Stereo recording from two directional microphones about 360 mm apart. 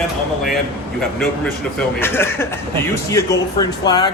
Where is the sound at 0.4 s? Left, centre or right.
Centre.